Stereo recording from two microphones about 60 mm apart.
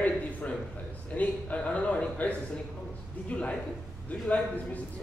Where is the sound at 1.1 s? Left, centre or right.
Left.